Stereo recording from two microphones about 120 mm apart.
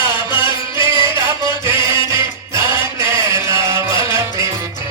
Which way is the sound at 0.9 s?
20° right (ahead or behind).